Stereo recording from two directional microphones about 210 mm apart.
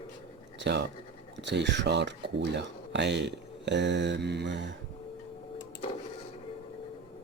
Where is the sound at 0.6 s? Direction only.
55° right (ahead or behind).